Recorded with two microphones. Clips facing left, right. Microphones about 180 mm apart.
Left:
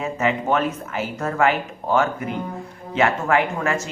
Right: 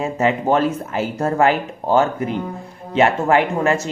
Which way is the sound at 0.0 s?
35° right (ahead or behind).